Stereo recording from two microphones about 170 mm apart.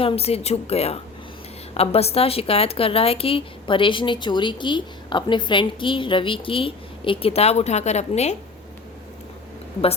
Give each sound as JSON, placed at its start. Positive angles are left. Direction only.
{"t": 0.0, "sound": "a woman's voice", "side_deg": 35}